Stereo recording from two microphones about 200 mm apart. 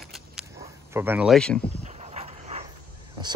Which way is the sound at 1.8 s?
30° right (ahead or behind).